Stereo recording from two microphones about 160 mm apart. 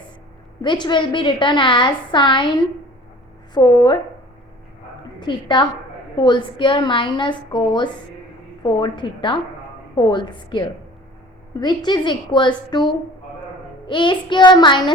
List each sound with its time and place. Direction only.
0.6 s a woman's voice: 30° left (ahead or behind)
5.2 s a woman's voice: 30° left (ahead or behind)